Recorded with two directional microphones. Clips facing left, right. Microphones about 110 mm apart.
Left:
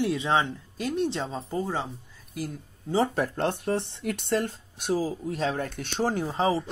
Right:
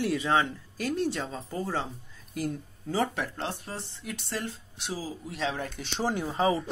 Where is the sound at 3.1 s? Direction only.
45° left (ahead or behind).